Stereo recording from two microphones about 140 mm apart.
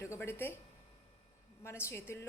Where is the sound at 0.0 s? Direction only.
20° left (ahead or behind).